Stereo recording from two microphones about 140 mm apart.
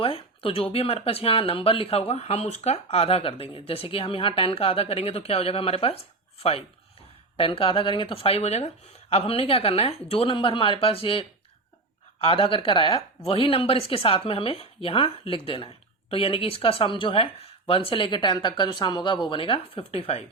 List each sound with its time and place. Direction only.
0.0 s speech: 40° left (ahead or behind)